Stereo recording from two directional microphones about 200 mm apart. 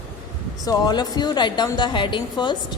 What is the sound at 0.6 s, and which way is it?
A woman's voice, 20° left (ahead or behind).